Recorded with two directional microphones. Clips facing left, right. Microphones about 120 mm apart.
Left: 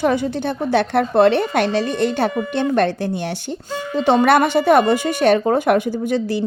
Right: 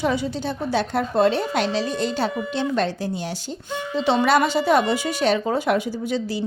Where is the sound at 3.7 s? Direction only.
45° left (ahead or behind).